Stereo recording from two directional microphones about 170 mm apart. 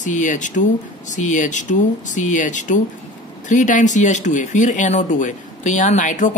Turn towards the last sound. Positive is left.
turn(degrees=45)  # may be behind; listen again after turning